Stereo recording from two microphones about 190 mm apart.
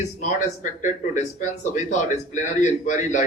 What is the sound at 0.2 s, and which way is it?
Speech, 40° left (ahead or behind).